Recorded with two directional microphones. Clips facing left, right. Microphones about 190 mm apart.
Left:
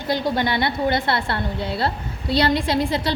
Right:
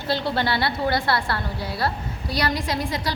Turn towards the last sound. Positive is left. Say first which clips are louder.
# left 5 dB
turn(degrees=30)  # may be behind; listen again after turning